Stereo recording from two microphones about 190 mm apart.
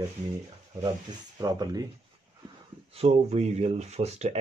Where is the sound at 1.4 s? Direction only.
20° right (ahead or behind).